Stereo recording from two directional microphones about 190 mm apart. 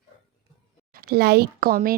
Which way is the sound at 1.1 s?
55° right (ahead or behind).